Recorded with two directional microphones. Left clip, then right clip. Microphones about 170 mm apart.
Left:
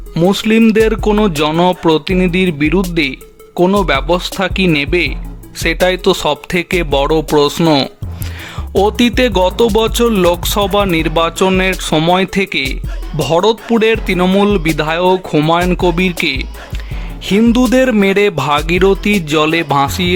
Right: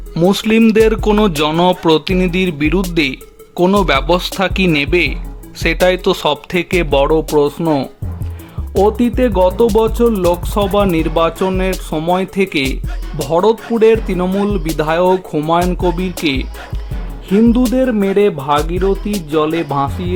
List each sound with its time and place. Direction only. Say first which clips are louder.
0.1 s music: left 1 dB; 5° left (ahead or behind)
7.0 s speech: left 2 dB; 5° left (ahead or behind)
13.1 s music: left 1 dB; 5° left (ahead or behind)